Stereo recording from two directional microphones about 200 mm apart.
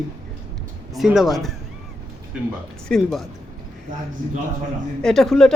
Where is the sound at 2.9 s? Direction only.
Centre (ahead or behind).